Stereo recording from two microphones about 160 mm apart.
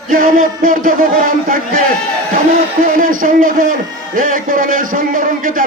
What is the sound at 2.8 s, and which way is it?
A man's voice, 60° right (ahead or behind).